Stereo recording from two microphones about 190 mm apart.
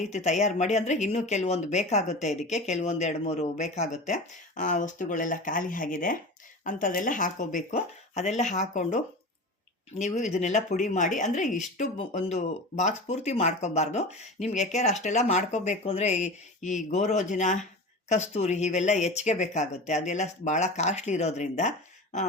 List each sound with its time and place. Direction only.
0.0 s speech: 40° left (ahead or behind)
10.0 s speech: 40° left (ahead or behind)